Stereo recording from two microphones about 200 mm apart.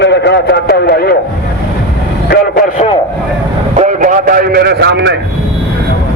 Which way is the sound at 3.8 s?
40° right (ahead or behind).